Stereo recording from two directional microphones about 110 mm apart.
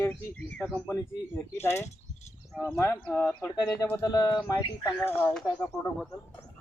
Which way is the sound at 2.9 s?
15° left (ahead or behind).